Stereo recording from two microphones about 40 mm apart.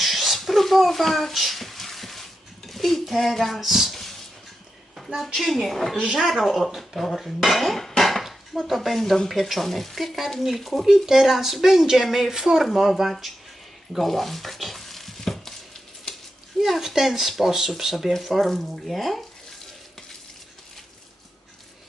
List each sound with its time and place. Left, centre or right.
0.0 s a sound: centre
2.6 s speech: centre
4.9 s a sound: centre
5.3 s speech: centre
6.0 s speech: centre
6.2 s speech: centre
14.0 s stir: centre
16.1 s a sound: centre
16.6 s speech: centre